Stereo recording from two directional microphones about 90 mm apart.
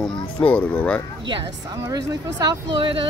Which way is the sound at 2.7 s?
70° right (ahead or behind).